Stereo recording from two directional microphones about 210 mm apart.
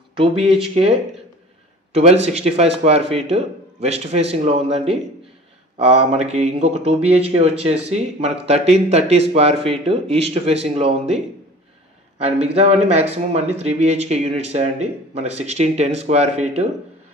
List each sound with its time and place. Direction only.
0.1 s speech: 25° right (ahead or behind)
12.2 s speech: 30° right (ahead or behind)